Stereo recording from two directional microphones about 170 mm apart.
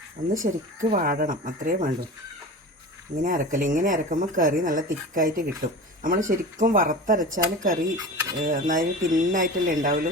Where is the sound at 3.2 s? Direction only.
50° right (ahead or behind).